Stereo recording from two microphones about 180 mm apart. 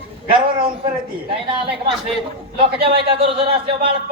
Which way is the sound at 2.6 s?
30° right (ahead or behind).